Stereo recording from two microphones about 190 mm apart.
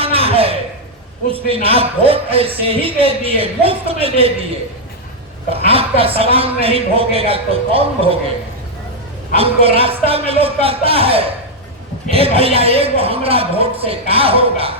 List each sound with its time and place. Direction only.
0.0 s a sound: 30° right (ahead or behind)
1.3 s a man's voice: 30° right (ahead or behind)
5.5 s a man's voice: 30° right (ahead or behind)
9.3 s a man's voice: 30° right (ahead or behind)